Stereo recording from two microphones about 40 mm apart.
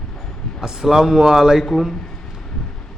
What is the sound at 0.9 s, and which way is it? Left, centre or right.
Speech, centre.